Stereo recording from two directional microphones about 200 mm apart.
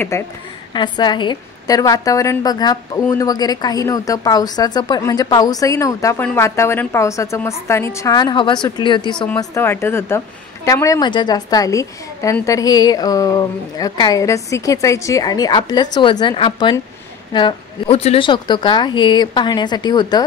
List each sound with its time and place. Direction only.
0.1 s a woman's voice: 15° left (ahead or behind)